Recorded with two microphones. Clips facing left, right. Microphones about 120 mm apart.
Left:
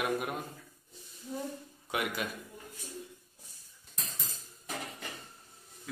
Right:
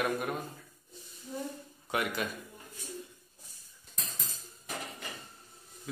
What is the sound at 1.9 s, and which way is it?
Speech, 5° left (ahead or behind).